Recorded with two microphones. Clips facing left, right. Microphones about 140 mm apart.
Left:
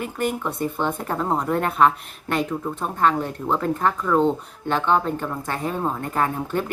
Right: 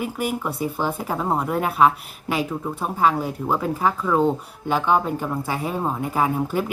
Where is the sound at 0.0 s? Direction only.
5° right (ahead or behind).